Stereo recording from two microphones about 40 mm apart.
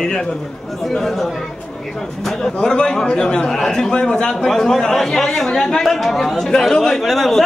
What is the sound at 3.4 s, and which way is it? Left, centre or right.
Speech, centre.